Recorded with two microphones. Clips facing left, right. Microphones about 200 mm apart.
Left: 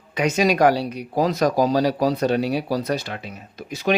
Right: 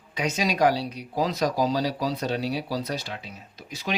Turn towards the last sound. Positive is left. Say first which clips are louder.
# left 10 dB
turn(degrees=55)  # may be behind; listen again after turning